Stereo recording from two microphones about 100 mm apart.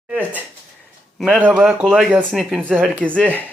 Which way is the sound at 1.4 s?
15° right (ahead or behind).